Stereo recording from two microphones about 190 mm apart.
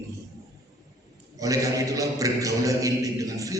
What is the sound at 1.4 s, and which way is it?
A man's voice, 20° right (ahead or behind).